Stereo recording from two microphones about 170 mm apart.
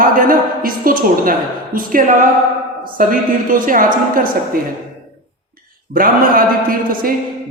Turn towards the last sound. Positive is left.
turn(degrees=-55)  # may be behind; listen again after turning